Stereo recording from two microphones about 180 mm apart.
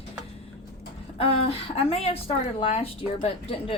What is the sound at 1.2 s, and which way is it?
A woman's voice, 35° left (ahead or behind).